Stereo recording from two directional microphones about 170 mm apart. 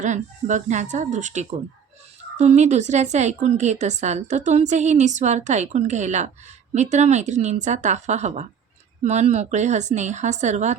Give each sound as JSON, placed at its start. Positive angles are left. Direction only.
{"t": 0.0, "sound": "a woman's voice", "side_deg": -45}